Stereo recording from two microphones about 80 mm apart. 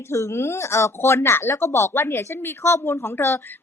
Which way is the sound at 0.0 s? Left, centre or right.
Left.